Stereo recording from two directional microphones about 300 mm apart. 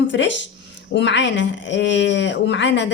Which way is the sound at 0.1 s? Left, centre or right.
Left.